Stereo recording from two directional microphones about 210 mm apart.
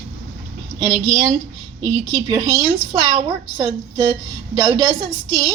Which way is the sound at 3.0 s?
25° right (ahead or behind).